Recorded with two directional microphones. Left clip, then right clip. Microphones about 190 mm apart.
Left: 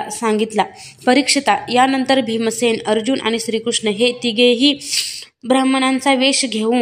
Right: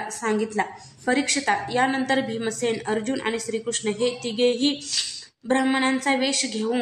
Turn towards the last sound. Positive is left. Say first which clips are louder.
# left 8 dB
turn(degrees=40)  # may be behind; listen again after turning